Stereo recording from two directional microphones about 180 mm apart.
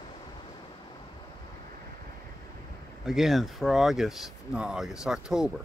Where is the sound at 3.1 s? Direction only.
Centre (ahead or behind).